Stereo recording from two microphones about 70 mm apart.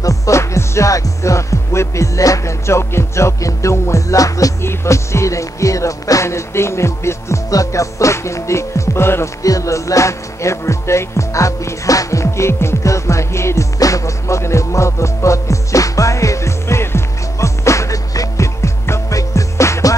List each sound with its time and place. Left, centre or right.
0.0 s music: left
4.6 s music: left
9.4 s music: left
13.7 s music: left